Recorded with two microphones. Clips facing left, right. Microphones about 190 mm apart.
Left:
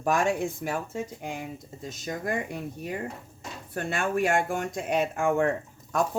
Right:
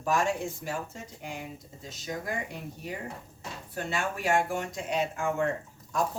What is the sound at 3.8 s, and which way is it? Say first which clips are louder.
Speech: left 6 dB; 55° left (ahead or behind).